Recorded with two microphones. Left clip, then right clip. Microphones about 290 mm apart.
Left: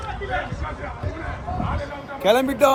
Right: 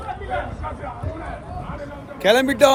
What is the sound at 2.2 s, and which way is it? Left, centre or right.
Speech, centre.